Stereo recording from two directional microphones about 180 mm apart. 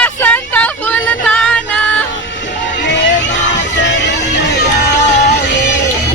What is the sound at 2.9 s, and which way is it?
Music, 80° left.